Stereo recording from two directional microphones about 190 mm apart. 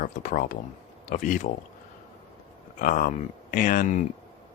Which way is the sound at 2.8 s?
45° left (ahead or behind).